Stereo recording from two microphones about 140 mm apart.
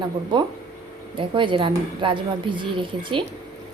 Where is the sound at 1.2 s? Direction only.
35° right (ahead or behind).